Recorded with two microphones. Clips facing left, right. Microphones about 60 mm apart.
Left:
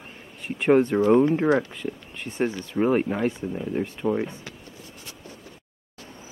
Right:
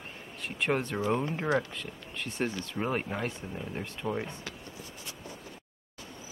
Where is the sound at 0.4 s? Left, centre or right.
Centre.